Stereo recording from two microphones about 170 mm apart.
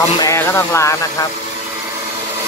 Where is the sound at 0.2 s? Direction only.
15° left (ahead or behind).